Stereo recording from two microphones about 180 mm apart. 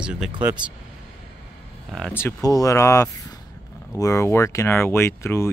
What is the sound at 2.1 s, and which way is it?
Speech, 15° left (ahead or behind).